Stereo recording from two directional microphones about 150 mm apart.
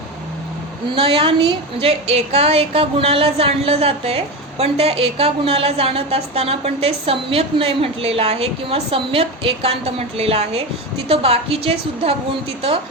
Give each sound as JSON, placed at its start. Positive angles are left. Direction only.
{"t": 0.9, "sound": "a woman's voice", "side_deg": -35}